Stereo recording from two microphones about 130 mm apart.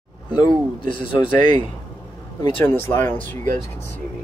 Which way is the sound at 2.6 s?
15° left (ahead or behind).